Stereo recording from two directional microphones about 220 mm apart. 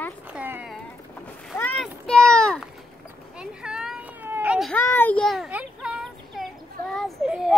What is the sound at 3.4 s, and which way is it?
Children playing, 5° right (ahead or behind).